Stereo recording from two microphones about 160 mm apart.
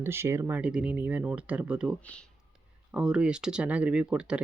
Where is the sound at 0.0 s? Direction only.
15° right (ahead or behind).